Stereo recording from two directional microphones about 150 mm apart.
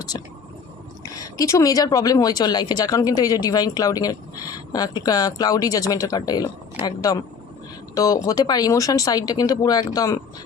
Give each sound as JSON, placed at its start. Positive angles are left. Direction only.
{"t": 0.1, "sound": "speech", "side_deg": 30}